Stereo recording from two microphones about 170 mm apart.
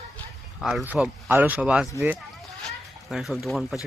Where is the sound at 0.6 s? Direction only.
Centre (ahead or behind).